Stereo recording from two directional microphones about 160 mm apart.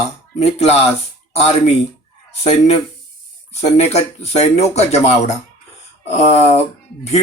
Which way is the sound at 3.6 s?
40° left (ahead or behind).